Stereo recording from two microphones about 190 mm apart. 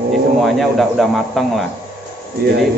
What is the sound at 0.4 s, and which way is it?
A man's voice, centre (ahead or behind).